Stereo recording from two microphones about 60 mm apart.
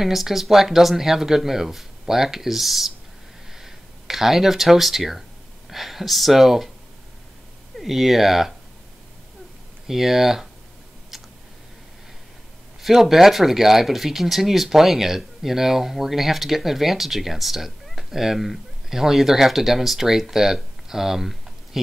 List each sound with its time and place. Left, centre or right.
0.0 s speech: centre
7.8 s speech: centre
9.8 s speech: centre
12.8 s speech: centre